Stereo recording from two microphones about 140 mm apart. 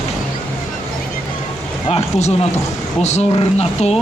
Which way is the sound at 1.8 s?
50° left (ahead or behind).